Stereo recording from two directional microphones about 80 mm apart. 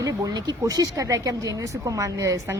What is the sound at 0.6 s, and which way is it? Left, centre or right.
Speech, right.